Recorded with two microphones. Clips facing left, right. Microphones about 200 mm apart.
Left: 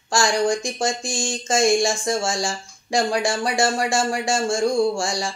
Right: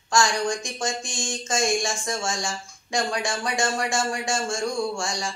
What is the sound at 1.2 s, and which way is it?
Speech, 30° left (ahead or behind).